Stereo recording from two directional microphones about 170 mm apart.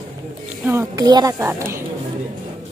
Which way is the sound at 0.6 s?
15° right (ahead or behind).